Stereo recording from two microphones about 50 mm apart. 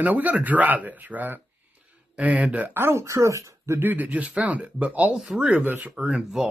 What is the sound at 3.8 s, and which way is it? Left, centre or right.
Speech, right.